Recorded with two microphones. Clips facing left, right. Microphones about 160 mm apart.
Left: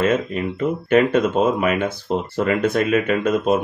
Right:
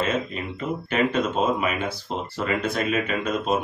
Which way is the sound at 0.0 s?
50° left (ahead or behind).